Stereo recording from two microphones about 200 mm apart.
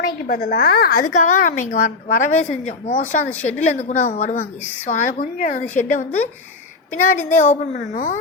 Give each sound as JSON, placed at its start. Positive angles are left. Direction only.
{"t": 0.0, "sound": "a woman's voice", "side_deg": 50}